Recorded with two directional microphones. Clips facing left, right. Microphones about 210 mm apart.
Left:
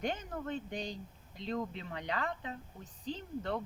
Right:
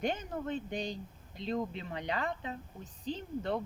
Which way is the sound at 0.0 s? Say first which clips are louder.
Right 3 dB; 25° right (ahead or behind).